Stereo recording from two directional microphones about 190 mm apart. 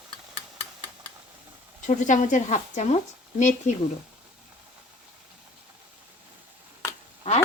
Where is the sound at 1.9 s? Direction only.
40° left (ahead or behind).